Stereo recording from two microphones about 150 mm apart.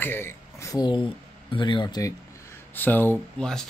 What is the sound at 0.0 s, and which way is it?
Speech, 15° left (ahead or behind).